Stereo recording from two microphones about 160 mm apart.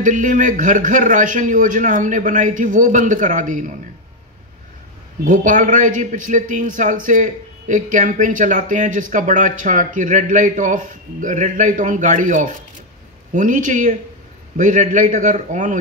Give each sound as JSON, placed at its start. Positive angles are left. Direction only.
{"t": 0.0, "sound": "a man's voice", "side_deg": -50}
{"t": 5.2, "sound": "a man's voice", "side_deg": -50}